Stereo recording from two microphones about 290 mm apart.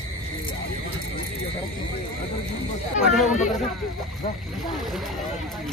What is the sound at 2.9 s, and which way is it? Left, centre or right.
Speech, left.